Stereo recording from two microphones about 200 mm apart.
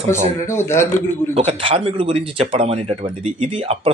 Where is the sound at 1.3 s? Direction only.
30° right (ahead or behind).